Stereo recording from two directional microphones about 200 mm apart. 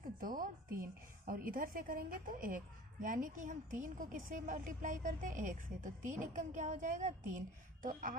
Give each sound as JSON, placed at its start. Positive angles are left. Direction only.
{"t": 0.2, "sound": "a woman's voice", "side_deg": -45}